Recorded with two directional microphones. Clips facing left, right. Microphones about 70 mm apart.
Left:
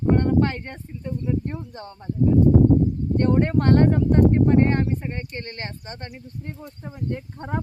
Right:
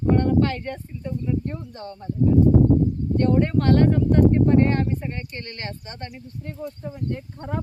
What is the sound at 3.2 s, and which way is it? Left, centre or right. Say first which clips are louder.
Speech: even; left.